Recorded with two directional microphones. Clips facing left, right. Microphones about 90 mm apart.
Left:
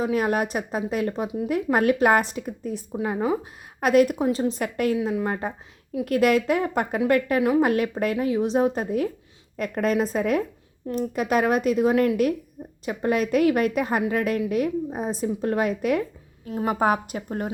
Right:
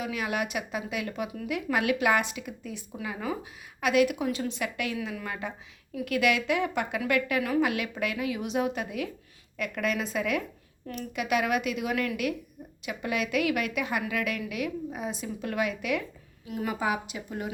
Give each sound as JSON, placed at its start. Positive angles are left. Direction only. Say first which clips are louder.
{"t": 0.0, "sound": "a woman's voice", "louder": "left 8 dB", "side_deg": 40}
{"t": 16.7, "sound": "a woman's voice", "louder": "left 9 dB", "side_deg": 45}